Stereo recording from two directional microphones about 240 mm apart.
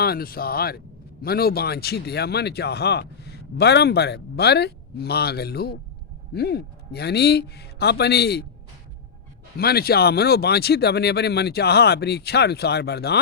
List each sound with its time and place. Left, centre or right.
0.0 s speech: left
9.6 s speech: left